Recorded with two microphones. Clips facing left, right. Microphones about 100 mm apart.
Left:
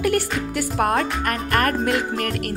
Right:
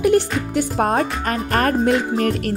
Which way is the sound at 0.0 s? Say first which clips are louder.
Right 5 dB; 25° right (ahead or behind).